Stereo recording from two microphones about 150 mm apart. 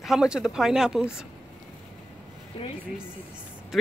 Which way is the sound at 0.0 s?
5° right (ahead or behind).